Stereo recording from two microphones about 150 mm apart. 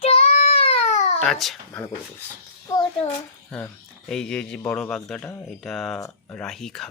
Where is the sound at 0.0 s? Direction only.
40° left (ahead or behind).